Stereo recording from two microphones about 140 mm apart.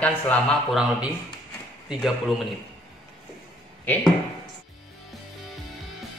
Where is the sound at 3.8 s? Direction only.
10° left (ahead or behind).